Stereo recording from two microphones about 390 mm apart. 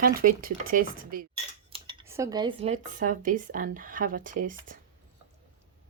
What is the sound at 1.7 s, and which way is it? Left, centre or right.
Speech, centre.